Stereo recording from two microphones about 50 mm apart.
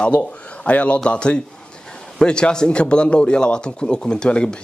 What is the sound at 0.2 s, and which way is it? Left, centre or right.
A man's voice, left.